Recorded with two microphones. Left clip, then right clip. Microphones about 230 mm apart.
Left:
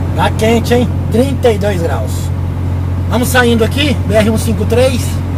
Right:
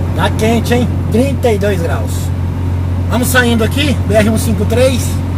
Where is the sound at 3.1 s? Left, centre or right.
Centre.